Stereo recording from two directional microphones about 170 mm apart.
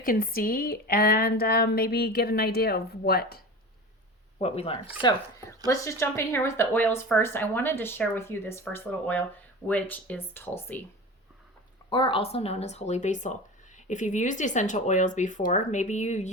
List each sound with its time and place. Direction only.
0.0 s speech: 55° left (ahead or behind)
4.4 s speech: 35° left (ahead or behind)
5.6 s speech: 20° left (ahead or behind)
11.9 s speech: 30° left (ahead or behind); by 16.3 s 45° left (ahead or behind)